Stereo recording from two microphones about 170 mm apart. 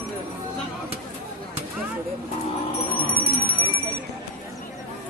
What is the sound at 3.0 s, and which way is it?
Music, 65° right (ahead or behind).